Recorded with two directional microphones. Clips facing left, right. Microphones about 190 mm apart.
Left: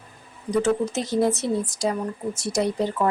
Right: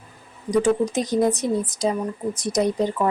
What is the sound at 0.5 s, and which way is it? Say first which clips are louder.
Speech: right 2 dB; 15° right (ahead or behind).